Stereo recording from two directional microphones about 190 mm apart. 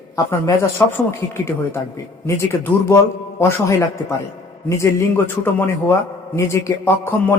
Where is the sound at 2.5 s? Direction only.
15° left (ahead or behind).